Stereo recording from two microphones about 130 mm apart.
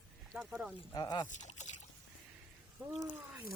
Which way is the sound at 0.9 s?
30° left (ahead or behind).